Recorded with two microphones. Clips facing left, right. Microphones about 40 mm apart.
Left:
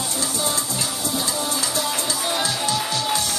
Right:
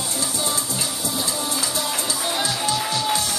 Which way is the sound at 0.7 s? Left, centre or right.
Centre.